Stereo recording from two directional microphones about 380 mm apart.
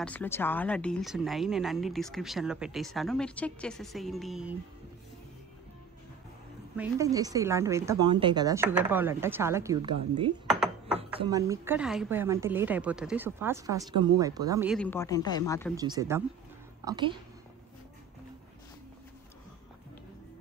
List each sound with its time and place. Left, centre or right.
0.0 s speech: centre
6.8 s a woman's voice: centre
10.4 s dishes: centre
11.1 s speech: centre
15.7 s a woman's voice: centre